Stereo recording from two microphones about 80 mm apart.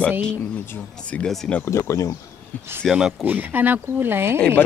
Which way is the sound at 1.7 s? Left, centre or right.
Left.